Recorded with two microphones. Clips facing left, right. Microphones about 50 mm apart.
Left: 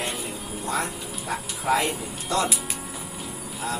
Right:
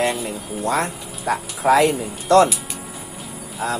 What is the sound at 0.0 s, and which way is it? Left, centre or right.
Music, right.